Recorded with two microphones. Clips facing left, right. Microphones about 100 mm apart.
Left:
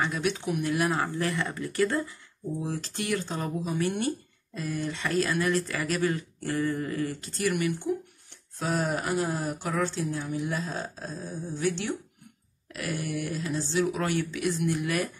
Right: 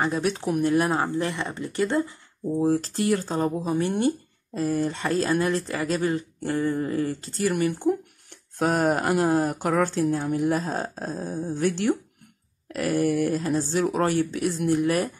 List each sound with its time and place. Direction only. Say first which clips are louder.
0.0 s speech: right 4 dB; 35° right (ahead or behind)
2.6 s speech: right 13 dB; 40° right (ahead or behind)
8.5 s speech: right 7 dB; 60° right (ahead or behind); by 15.1 s 35° right (ahead or behind)